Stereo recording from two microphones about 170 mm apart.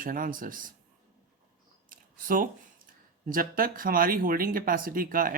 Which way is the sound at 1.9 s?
55° right (ahead or behind).